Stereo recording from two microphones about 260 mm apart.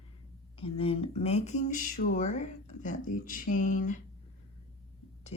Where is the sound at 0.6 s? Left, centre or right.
Left.